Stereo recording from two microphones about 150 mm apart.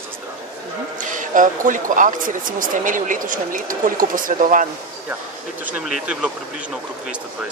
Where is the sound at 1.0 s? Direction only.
60° right (ahead or behind).